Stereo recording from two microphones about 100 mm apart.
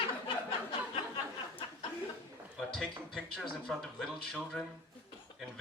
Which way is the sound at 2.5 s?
5° left (ahead or behind).